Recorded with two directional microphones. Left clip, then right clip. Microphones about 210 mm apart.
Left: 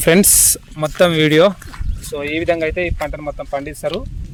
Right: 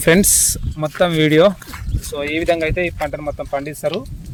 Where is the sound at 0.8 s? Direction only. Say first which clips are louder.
Left 2 dB; 50° left (ahead or behind).